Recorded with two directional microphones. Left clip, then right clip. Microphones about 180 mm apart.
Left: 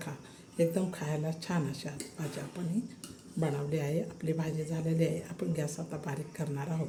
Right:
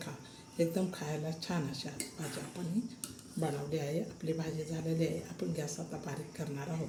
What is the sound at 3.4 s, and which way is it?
Speech, 15° left (ahead or behind).